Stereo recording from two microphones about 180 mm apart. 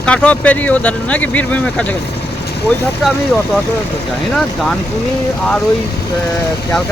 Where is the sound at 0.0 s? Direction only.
5° left (ahead or behind).